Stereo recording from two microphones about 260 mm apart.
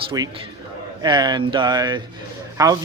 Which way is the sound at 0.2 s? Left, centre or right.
Centre.